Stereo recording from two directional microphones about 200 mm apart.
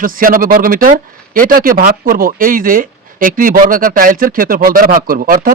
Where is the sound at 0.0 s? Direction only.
45° right (ahead or behind).